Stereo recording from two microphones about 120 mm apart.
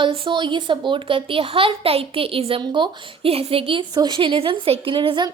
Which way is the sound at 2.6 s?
40° right (ahead or behind).